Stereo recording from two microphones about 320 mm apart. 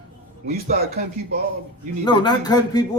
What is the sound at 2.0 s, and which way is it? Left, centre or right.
Speech, centre.